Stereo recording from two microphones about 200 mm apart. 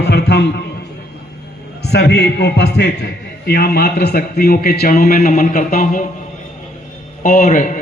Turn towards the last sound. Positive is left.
turn(degrees=40)  # may be behind; listen again after turning